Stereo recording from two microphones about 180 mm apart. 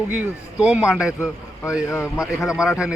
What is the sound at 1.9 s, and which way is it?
Speech, 15° left (ahead or behind).